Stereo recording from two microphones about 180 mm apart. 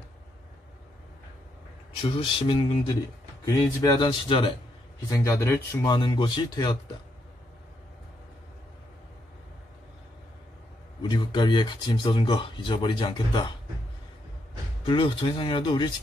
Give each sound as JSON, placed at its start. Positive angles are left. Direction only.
{"t": 2.0, "sound": "speech", "side_deg": 30}
{"t": 11.0, "sound": "speech", "side_deg": 25}
{"t": 14.9, "sound": "speech", "side_deg": 30}